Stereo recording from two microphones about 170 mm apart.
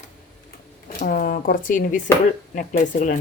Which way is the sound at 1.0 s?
55° left (ahead or behind).